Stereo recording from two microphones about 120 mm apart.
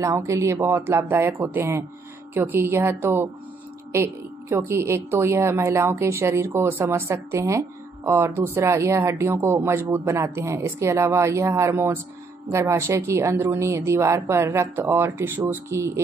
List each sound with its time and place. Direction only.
0.0 s speech: 25° right (ahead or behind)